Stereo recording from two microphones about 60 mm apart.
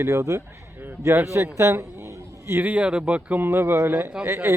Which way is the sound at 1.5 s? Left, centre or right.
Right.